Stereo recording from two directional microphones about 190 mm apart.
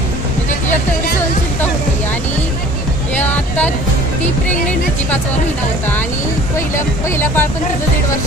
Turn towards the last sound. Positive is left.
turn(degrees=15)  # may be behind; listen again after turning